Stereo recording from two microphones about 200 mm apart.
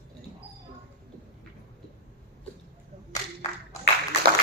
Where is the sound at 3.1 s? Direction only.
15° left (ahead or behind).